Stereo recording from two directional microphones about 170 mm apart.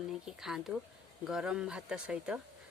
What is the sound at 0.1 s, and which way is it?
Speech, 5° right (ahead or behind).